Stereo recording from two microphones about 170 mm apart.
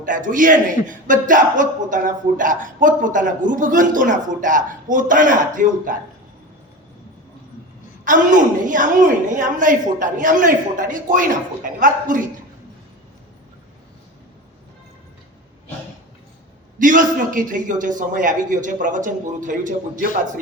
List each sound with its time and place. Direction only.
0.0 s a man's voice: 50° right (ahead or behind)
8.0 s a man's voice: 50° right (ahead or behind)
16.7 s a man's voice: 50° right (ahead or behind)